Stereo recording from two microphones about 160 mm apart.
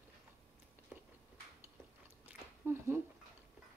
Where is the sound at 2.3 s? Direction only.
15° right (ahead or behind).